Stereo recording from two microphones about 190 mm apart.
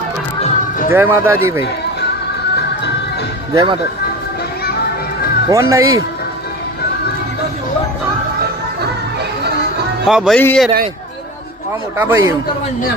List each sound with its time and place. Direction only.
0.9 s speech: 10° right (ahead or behind)
3.5 s speech: 20° right (ahead or behind)
5.5 s speech: 15° right (ahead or behind)
10.1 s a man's voice: centre (ahead or behind)
11.9 s speech: 15° right (ahead or behind)